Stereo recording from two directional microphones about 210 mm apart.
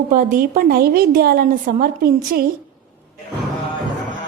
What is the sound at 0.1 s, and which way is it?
A woman's voice, 40° right (ahead or behind).